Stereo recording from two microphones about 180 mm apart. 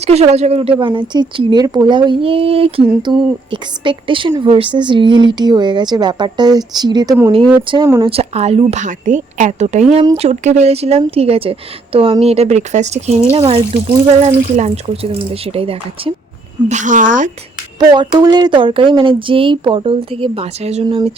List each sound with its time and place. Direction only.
0.0 s a woman's voice: 35° right (ahead or behind)
16.6 s speech: 45° right (ahead or behind)
17.7 s a woman's voice: 25° right (ahead or behind)